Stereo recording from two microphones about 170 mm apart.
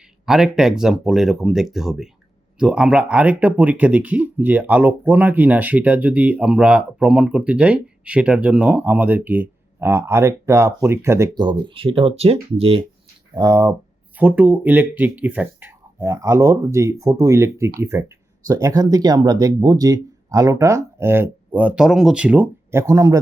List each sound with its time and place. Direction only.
0.3 s speech: 5° right (ahead or behind); by 12.8 s 35° right (ahead or behind)
13.3 s speech: 20° right (ahead or behind)